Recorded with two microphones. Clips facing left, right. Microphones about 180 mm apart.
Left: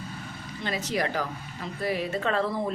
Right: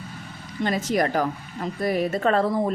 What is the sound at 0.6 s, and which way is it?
A woman's voice, 50° right (ahead or behind).